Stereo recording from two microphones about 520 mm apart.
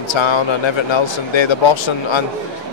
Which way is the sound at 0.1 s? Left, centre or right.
Left.